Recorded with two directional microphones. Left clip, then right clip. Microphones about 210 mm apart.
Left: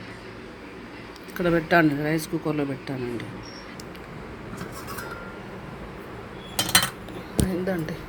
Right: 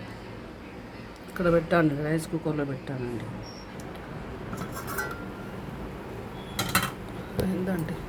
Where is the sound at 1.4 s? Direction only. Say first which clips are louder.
Left 3 dB; 10° left (ahead or behind).